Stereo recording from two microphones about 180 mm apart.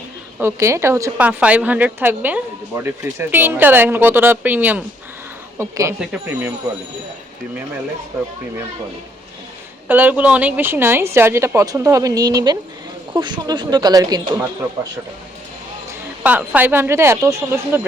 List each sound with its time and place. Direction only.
0.3 s a woman's voice: 15° right (ahead or behind)
9.9 s a woman's voice: 10° right (ahead or behind)
15.9 s a woman's voice: 10° right (ahead or behind)